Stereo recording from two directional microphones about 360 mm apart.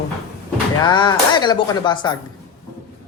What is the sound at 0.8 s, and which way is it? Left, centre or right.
Speech, centre.